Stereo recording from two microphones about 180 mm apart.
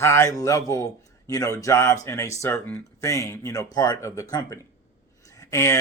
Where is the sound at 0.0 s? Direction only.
15° left (ahead or behind).